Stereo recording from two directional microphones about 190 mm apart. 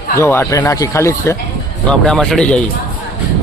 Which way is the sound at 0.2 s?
15° left (ahead or behind).